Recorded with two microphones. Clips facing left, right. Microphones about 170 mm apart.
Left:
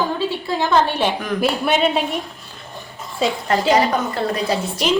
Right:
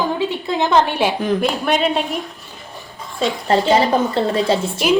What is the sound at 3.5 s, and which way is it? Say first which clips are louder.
A woman's voice: right 3 dB; 30° right (ahead or behind).